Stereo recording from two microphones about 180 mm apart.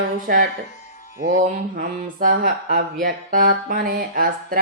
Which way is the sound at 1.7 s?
50° right (ahead or behind).